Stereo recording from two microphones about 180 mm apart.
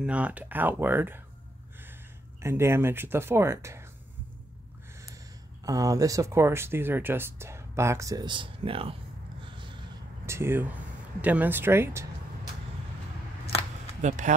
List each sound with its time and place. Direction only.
0.0 s speech: 5° right (ahead or behind)
2.4 s speech: 15° right (ahead or behind)
5.7 s speech: 20° right (ahead or behind)
9.4 s a sound: 25° right (ahead or behind)
10.2 s speech: 15° right (ahead or behind)
14.0 s speech: 40° right (ahead or behind)